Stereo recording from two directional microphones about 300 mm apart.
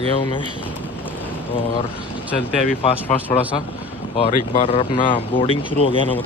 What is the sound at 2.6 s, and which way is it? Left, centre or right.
Speech, left.